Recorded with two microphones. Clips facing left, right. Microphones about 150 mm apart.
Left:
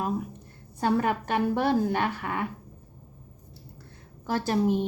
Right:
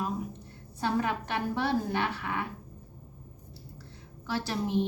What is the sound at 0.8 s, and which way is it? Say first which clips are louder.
A woman's voice: left 4 dB; 50° left (ahead or behind).